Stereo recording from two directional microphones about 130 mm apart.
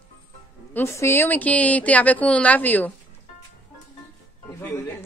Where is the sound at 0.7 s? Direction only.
20° left (ahead or behind).